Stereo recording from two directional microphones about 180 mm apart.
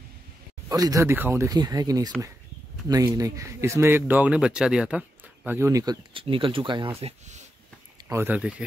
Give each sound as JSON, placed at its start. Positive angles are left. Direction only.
{"t": 0.7, "sound": "speech", "side_deg": -20}
{"t": 6.1, "sound": "speech", "side_deg": -30}
{"t": 7.0, "sound": "speech", "side_deg": -40}
{"t": 8.1, "sound": "speech", "side_deg": -10}